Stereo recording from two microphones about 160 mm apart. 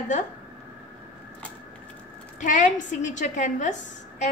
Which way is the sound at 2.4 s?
50° left (ahead or behind).